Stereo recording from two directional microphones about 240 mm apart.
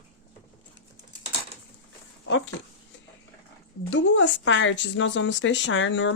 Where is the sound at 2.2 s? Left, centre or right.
Left.